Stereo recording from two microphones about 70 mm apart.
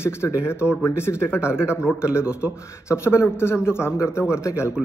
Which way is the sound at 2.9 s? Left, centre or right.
Left.